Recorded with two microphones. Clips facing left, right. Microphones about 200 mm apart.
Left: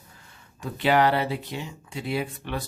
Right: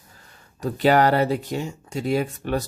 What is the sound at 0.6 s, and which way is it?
Speech, 40° right (ahead or behind).